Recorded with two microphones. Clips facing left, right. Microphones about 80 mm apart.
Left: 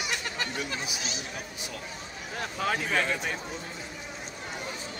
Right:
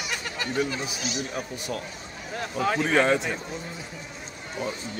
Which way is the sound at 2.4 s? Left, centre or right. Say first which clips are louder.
Right 4 dB; centre.